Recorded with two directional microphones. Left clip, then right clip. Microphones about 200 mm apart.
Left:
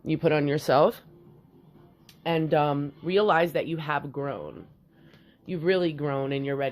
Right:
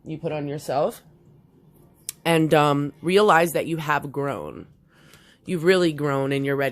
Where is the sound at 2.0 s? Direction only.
45° right (ahead or behind).